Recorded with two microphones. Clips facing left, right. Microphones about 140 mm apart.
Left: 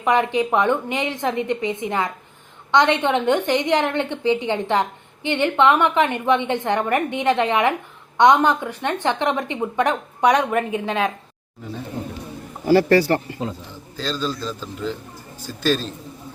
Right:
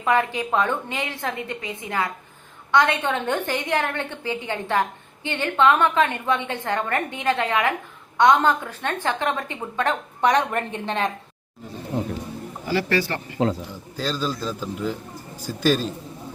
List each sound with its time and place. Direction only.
0.0 s a woman's voice: 15° left (ahead or behind)
12.6 s speech: 40° left (ahead or behind)
13.9 s a man's voice: 10° right (ahead or behind)